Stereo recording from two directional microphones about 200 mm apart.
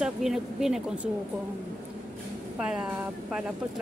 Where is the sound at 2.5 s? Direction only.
5° right (ahead or behind).